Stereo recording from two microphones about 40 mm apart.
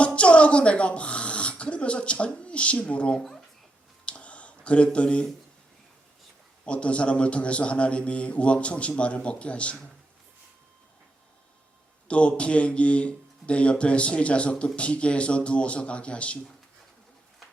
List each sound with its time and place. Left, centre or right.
0.0 s speech: left
4.0 s a sound: left
6.7 s a man's voice: left
12.0 s a man's voice: left